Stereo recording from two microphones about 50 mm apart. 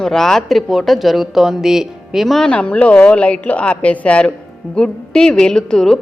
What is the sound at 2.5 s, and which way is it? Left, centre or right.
A woman's voice, left.